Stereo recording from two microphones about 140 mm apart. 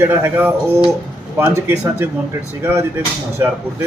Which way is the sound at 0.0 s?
15° right (ahead or behind).